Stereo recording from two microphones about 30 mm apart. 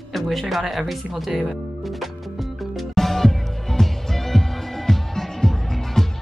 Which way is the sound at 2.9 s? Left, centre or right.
Centre.